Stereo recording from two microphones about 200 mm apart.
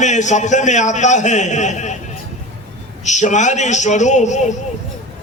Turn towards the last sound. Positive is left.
turn(degrees=35)  # may be behind; listen again after turning